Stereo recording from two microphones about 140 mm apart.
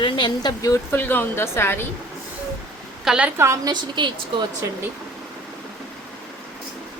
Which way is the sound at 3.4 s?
20° right (ahead or behind).